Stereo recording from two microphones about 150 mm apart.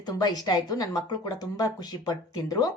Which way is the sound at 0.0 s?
25° left (ahead or behind).